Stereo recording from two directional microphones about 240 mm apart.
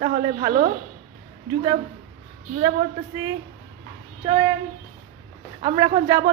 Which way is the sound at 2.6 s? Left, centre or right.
Right.